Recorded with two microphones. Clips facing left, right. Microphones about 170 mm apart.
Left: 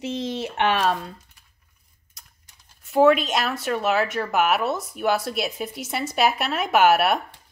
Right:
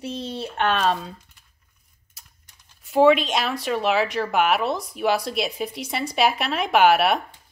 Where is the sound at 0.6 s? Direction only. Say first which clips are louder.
Even; 5° left (ahead or behind).